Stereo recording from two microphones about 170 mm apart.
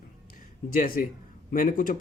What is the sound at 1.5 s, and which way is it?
Speech, 55° left (ahead or behind).